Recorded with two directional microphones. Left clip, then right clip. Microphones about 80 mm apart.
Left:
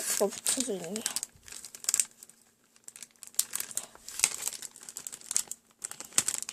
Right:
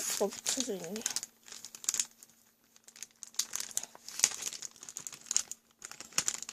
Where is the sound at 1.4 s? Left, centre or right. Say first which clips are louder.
Left 2 dB; centre.